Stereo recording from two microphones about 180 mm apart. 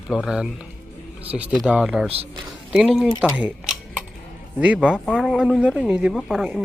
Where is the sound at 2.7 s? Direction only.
Centre (ahead or behind).